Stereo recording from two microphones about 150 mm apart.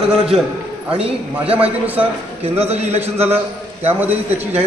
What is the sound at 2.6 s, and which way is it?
Speech, 45° right (ahead or behind).